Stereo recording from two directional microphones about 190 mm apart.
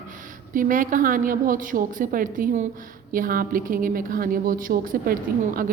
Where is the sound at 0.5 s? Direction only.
45° right (ahead or behind).